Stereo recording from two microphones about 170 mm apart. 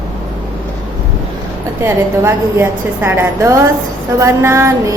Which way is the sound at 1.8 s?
15° right (ahead or behind).